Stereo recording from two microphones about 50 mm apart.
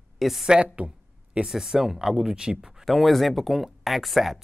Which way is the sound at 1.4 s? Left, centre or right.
Centre.